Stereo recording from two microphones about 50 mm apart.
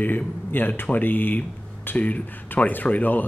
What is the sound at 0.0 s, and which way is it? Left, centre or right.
Speech, left.